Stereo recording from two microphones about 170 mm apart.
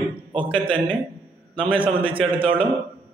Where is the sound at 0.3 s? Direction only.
30° right (ahead or behind).